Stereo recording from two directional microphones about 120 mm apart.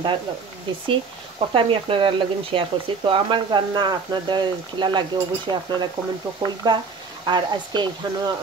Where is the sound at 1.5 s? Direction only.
50° right (ahead or behind).